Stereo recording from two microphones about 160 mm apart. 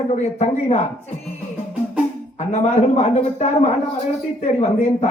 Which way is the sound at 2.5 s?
40° left (ahead or behind).